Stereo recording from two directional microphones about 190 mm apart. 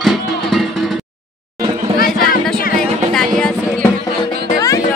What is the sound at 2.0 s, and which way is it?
Music, 50° left (ahead or behind).